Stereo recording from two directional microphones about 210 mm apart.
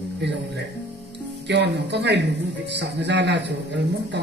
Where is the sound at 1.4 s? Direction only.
55° right (ahead or behind).